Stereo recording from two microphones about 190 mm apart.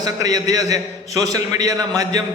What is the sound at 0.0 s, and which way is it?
A man's voice, 20° right (ahead or behind).